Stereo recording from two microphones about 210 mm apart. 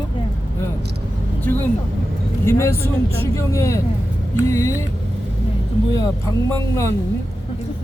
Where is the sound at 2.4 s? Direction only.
10° left (ahead or behind).